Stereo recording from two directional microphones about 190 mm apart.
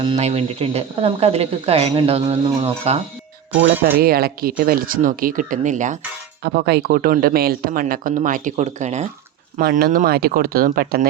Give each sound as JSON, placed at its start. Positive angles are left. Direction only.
{"t": 0.0, "sound": "speech", "side_deg": -30}
{"t": 3.9, "sound": "speech", "side_deg": -50}
{"t": 6.4, "sound": "speech", "side_deg": -55}
{"t": 9.6, "sound": "speech", "side_deg": -50}